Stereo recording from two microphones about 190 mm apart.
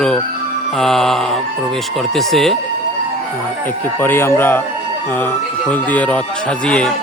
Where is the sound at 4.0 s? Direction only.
10° left (ahead or behind).